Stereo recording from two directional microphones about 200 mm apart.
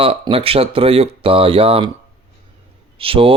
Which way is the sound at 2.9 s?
25° right (ahead or behind).